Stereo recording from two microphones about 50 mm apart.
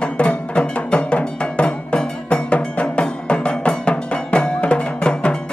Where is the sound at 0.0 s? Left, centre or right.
Left.